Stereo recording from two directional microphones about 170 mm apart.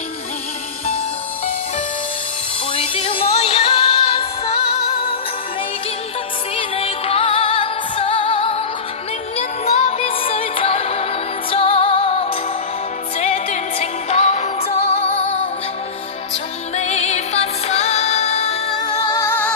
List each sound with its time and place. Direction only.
2.7 s music: 35° left (ahead or behind)
6.5 s music: 35° left (ahead or behind)
16.7 s music: 40° left (ahead or behind)
18.8 s music: 25° left (ahead or behind)